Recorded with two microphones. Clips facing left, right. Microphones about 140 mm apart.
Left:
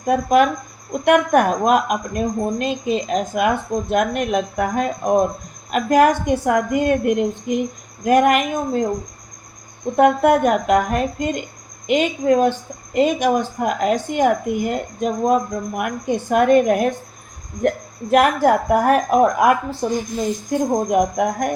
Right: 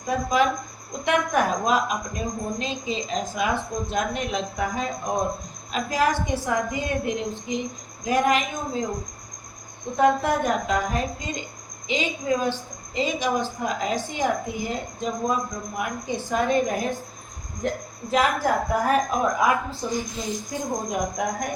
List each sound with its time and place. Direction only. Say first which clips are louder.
0.0 s a woman's voice: left 7 dB; 60° left (ahead or behind)
10.0 s a woman's voice: left 7 dB; 60° left (ahead or behind)